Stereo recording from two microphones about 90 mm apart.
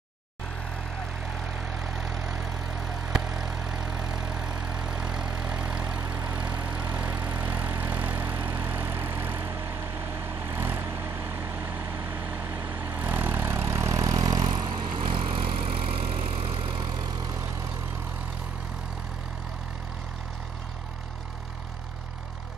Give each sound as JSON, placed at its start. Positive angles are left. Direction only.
{"t": 1.7, "sound": "vehicle", "side_deg": -10}
{"t": 3.3, "sound": "vehicle", "side_deg": -10}